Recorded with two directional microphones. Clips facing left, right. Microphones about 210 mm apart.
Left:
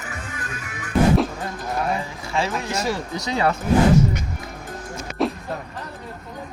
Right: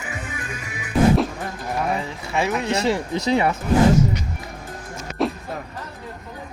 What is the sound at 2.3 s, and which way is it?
Speech, 20° right (ahead or behind).